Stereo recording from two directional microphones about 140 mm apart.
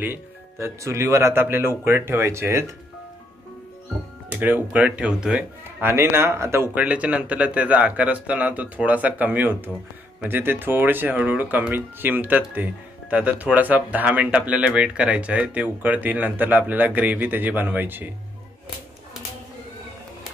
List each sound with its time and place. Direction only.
0.0 s speech: 15° right (ahead or behind)
4.3 s speech: 10° right (ahead or behind)